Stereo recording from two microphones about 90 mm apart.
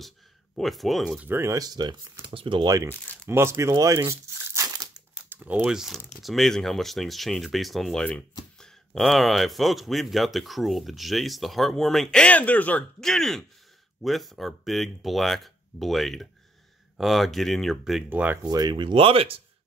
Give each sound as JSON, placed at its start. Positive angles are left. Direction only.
{"t": 0.6, "sound": "speech", "side_deg": 0}
{"t": 1.2, "sound": "speech", "side_deg": -30}
{"t": 1.7, "sound": "speech", "side_deg": -50}
{"t": 2.2, "sound": "speech", "side_deg": -70}
{"t": 2.8, "sound": "speech", "side_deg": -30}
{"t": 3.7, "sound": "crumpling", "side_deg": -35}
{"t": 5.3, "sound": "speech", "side_deg": -20}
{"t": 5.7, "sound": "speech", "side_deg": -5}
{"t": 8.0, "sound": "speech", "side_deg": 15}
{"t": 13.0, "sound": "speech", "side_deg": 5}
{"t": 18.1, "sound": "speech", "side_deg": -20}
{"t": 18.4, "sound": "speech", "side_deg": -50}